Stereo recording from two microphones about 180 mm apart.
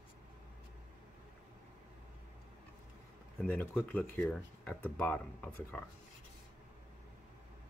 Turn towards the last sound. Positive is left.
turn(degrees=5)  # may be behind; listen again after turning